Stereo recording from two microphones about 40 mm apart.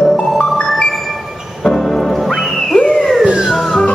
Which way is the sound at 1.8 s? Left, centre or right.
Centre.